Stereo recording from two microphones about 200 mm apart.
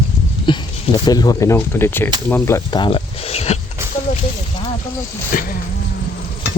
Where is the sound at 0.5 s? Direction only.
25° left (ahead or behind).